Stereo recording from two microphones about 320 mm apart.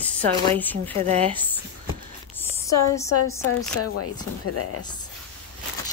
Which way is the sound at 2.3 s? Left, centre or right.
Centre.